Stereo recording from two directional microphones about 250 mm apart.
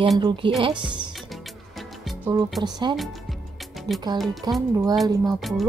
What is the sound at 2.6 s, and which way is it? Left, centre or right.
Speech, centre.